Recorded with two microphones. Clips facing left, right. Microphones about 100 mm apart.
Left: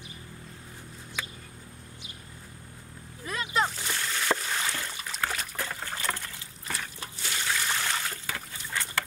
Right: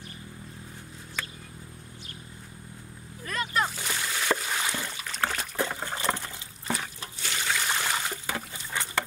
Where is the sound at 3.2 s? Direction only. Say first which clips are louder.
Even; 15° left (ahead or behind).